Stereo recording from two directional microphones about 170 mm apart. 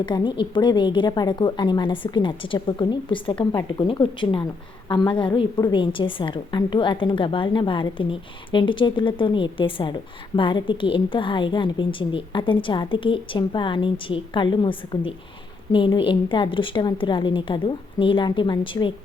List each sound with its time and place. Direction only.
0.0 s a woman's voice: 30° left (ahead or behind)